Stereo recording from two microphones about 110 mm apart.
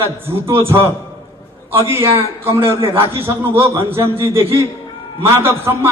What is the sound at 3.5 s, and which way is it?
Speech, 55° right (ahead or behind).